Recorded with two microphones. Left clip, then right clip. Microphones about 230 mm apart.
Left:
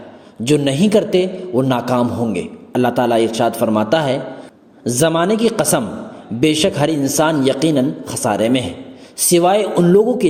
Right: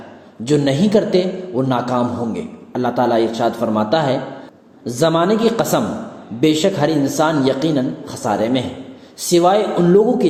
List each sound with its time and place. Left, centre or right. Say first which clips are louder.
0.4 s a man's voice: left 1 dB; left